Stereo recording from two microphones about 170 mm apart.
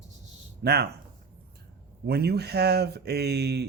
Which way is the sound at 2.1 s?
70° right (ahead or behind).